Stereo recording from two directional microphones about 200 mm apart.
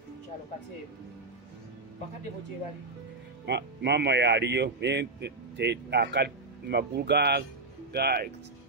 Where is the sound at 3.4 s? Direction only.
55° right (ahead or behind).